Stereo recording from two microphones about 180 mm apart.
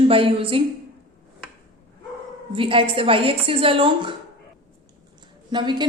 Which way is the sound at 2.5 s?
30° right (ahead or behind).